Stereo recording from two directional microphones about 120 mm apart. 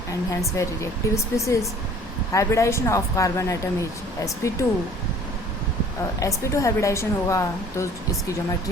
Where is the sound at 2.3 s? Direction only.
25° left (ahead or behind).